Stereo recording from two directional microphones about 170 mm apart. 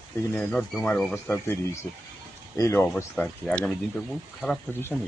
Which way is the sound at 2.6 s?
15° left (ahead or behind).